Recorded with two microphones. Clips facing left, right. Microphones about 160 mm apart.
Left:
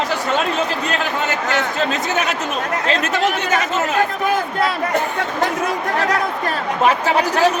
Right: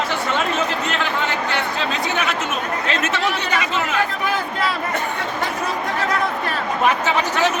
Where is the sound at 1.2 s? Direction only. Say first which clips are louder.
Left 2 dB; 45° left (ahead or behind).